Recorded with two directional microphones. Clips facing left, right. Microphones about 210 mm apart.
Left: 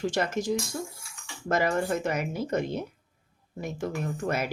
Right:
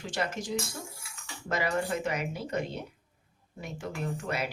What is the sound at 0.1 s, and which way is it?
Speech, 45° left (ahead or behind).